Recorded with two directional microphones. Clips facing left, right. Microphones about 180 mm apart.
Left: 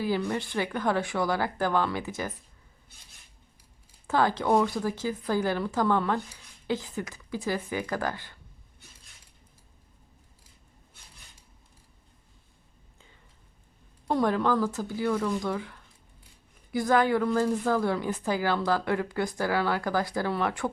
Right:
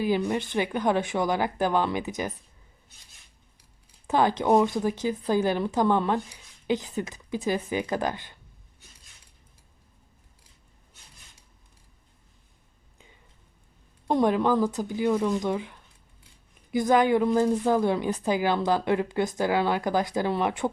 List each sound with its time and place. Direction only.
0.0 s a woman's voice: 20° right (ahead or behind)
4.0 s a woman's voice: 20° right (ahead or behind)
14.1 s a woman's voice: 20° right (ahead or behind)